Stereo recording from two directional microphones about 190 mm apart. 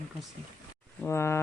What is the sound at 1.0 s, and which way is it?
Speech, 15° left (ahead or behind).